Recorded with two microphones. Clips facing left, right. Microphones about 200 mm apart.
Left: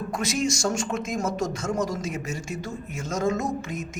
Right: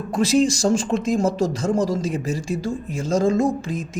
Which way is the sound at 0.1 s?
30° right (ahead or behind).